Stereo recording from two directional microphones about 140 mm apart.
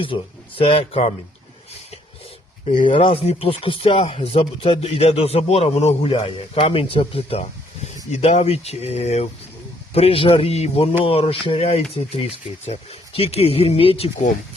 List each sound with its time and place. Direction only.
0.0 s speech: 40° left (ahead or behind)
2.6 s speech: 40° left (ahead or behind)